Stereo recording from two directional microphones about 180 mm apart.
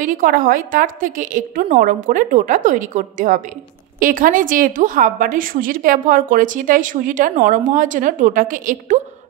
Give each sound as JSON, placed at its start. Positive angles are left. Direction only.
{"t": 0.0, "sound": "a woman's voice", "side_deg": -50}